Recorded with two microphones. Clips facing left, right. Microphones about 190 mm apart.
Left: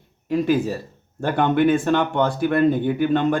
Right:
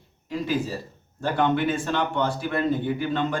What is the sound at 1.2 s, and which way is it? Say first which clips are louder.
Speech: left 5 dB; 55° left (ahead or behind).